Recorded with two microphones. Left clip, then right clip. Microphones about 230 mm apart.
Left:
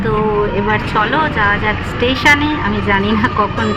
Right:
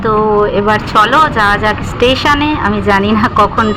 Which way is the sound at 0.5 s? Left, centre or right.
Centre.